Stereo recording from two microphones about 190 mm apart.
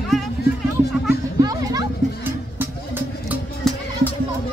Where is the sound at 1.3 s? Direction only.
20° right (ahead or behind).